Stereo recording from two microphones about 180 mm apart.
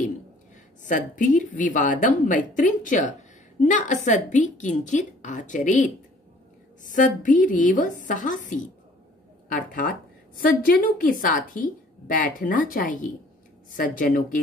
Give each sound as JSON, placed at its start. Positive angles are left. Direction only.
{"t": 0.8, "sound": "a woman's voice", "side_deg": 45}